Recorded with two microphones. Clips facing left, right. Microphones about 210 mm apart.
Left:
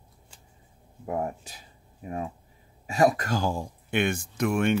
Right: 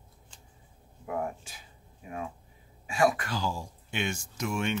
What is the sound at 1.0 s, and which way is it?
Speech, 35° left (ahead or behind).